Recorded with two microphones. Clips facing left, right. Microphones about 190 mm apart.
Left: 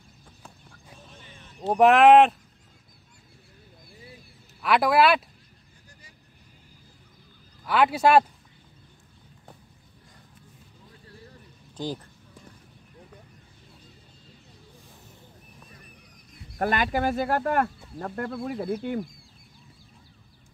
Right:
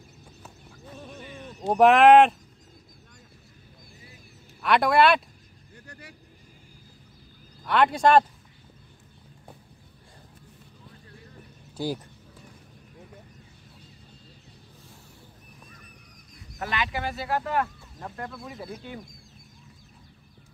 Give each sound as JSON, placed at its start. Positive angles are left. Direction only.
{"t": 1.6, "sound": "speech", "side_deg": 0}
{"t": 4.6, "sound": "speech", "side_deg": 5}
{"t": 5.9, "sound": "vehicle", "side_deg": -65}
{"t": 7.6, "sound": "speech", "side_deg": 5}
{"t": 11.7, "sound": "speech", "side_deg": -10}
{"t": 16.5, "sound": "speech", "side_deg": 50}
{"t": 17.9, "sound": "speech", "side_deg": 65}